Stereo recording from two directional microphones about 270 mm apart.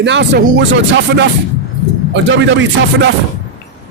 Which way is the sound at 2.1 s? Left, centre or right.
Right.